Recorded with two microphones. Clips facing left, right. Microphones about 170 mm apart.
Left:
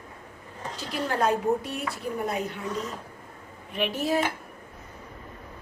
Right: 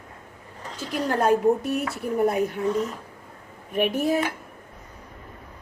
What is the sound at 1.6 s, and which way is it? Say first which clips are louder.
Speech: right 7 dB; 5° right (ahead or behind).